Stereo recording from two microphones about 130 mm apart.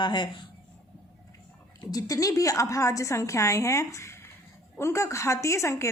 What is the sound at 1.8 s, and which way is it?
A woman's voice, 30° left (ahead or behind).